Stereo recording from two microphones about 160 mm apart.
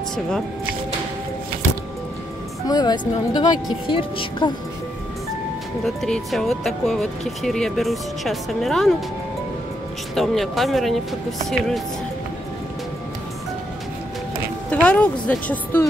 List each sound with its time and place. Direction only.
2.7 s speech: 25° left (ahead or behind)
5.9 s speech: centre (ahead or behind)
10.1 s speech: centre (ahead or behind)
14.7 s a woman's voice: 10° left (ahead or behind)